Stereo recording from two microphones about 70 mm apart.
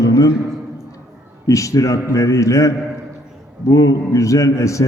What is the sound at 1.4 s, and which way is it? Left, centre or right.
A man's voice, left.